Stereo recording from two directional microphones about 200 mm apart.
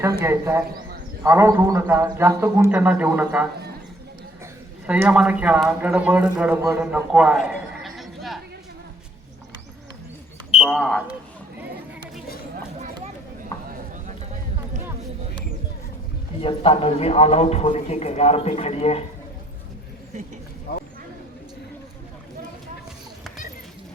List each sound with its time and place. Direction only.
0.0 s a man's voice: 15° right (ahead or behind)
4.9 s a man's voice: 5° right (ahead or behind)
10.6 s speech: centre (ahead or behind)
16.4 s a man's voice: 30° left (ahead or behind)
20.7 s a sound: 50° left (ahead or behind)